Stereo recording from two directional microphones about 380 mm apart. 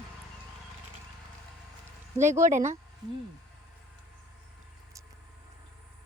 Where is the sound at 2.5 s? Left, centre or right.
Centre.